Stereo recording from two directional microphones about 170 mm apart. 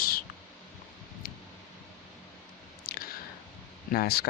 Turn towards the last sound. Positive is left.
turn(degrees=65)  # may be behind; listen again after turning